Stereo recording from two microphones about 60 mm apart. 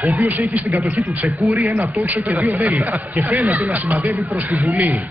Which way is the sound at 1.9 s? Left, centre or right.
Right.